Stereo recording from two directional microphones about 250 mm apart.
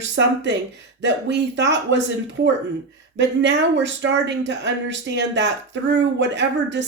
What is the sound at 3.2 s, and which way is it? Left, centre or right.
Speech, right.